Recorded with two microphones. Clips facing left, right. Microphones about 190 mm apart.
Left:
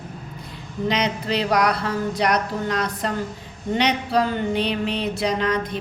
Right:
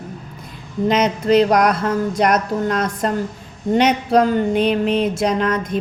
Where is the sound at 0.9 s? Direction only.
45° right (ahead or behind).